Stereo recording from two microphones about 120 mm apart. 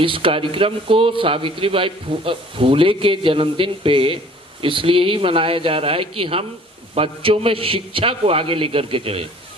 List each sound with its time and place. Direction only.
0.0 s a man's voice: 45° right (ahead or behind)